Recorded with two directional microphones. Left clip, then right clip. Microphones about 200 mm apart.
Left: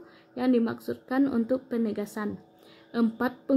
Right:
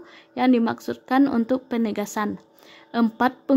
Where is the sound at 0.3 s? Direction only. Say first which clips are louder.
Right 6 dB; 35° right (ahead or behind).